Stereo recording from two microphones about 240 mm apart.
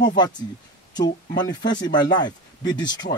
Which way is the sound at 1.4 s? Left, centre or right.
Centre.